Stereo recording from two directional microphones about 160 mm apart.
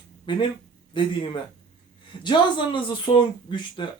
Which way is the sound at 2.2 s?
30° left (ahead or behind).